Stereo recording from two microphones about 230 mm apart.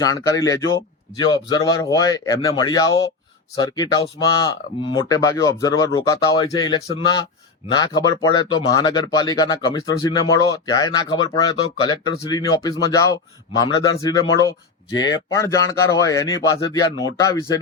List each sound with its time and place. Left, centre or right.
0.0 s speech: centre